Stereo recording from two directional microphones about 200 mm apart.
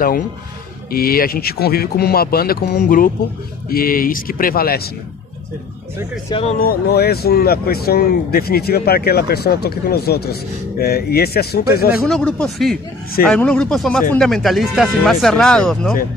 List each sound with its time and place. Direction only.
0.9 s speech: 50° left (ahead or behind)
6.6 s speech: 50° left (ahead or behind)
12.1 s speech: 5° left (ahead or behind)